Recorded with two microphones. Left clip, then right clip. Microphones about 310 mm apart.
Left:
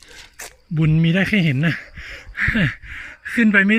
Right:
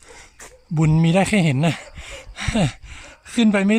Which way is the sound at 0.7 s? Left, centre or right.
Centre.